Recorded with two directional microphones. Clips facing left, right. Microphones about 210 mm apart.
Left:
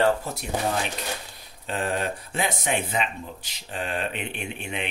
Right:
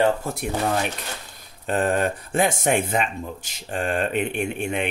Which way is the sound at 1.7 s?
50° right (ahead or behind).